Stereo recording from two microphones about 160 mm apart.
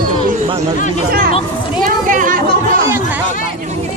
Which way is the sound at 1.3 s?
35° left (ahead or behind).